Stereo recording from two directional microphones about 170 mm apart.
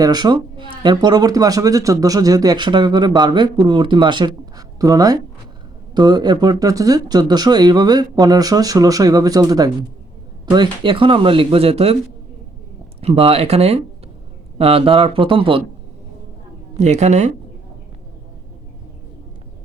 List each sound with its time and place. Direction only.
0.0 s speech: 25° right (ahead or behind)
13.0 s speech: 35° right (ahead or behind)
16.7 s a woman's voice: 45° right (ahead or behind)